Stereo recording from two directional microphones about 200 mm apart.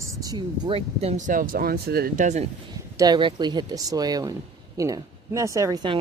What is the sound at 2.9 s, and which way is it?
Speech, 20° right (ahead or behind).